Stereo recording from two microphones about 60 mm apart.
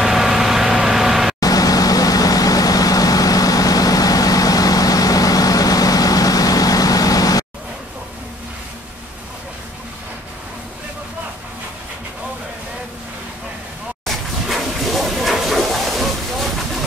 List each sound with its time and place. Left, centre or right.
0.0 s vehicle: centre
1.4 s vehicle: left
14.0 s a sound: centre